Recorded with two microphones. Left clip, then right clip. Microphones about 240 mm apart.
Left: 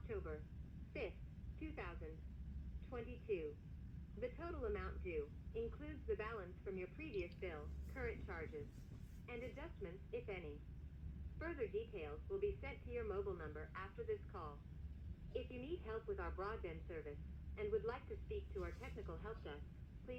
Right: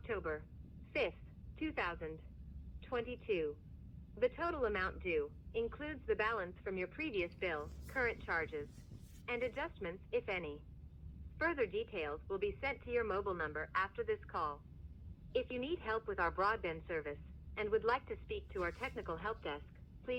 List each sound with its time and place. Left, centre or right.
0.1 s a sound: right
0.9 s vehicle: right
1.5 s speech: right